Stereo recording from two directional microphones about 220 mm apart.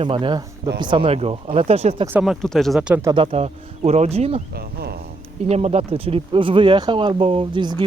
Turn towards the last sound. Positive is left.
turn(degrees=-20)  # may be behind; listen again after turning